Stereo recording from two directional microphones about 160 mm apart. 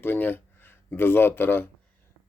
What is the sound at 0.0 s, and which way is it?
Speech, 10° left (ahead or behind).